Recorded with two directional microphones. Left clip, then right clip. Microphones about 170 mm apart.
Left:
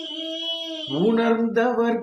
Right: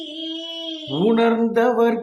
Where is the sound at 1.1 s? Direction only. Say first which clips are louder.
Right 4 dB; 25° right (ahead or behind).